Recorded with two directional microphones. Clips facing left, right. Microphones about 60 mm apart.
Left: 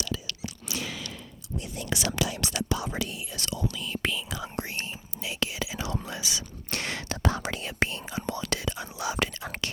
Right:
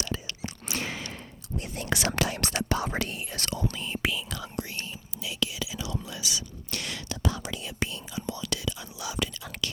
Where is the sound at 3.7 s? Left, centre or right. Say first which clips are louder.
Even; right.